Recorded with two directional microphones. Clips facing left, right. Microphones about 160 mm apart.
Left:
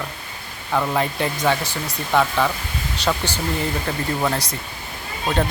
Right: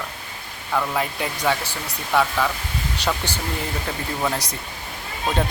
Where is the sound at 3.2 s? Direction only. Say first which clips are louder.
Left 2 dB; 10° right (ahead or behind).